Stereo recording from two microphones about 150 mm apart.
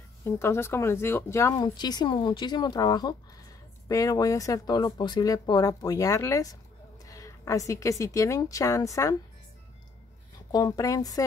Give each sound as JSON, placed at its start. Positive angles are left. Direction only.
{"t": 0.2, "sound": "a woman's voice", "side_deg": 15}
{"t": 10.5, "sound": "speech", "side_deg": 25}